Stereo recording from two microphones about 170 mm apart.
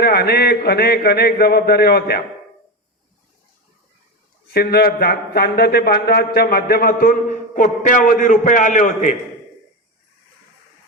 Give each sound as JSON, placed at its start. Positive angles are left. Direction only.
{"t": 0.0, "sound": "a man's voice", "side_deg": 70}
{"t": 4.5, "sound": "a man's voice", "side_deg": 65}